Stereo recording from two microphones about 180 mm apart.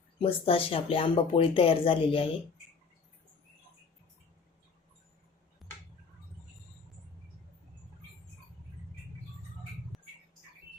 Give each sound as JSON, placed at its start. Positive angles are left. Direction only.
{"t": 0.2, "sound": "speech", "side_deg": 30}